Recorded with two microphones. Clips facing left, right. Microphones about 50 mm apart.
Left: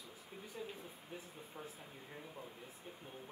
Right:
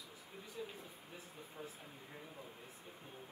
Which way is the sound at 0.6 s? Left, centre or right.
Centre.